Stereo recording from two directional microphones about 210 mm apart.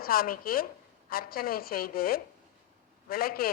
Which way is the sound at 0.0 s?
45° left (ahead or behind).